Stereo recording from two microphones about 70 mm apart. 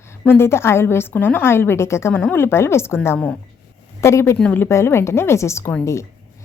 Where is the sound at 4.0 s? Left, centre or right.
Left.